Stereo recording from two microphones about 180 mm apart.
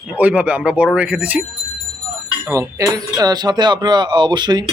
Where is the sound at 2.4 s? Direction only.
20° right (ahead or behind).